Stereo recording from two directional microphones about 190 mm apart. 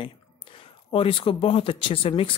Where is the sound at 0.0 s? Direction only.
30° left (ahead or behind).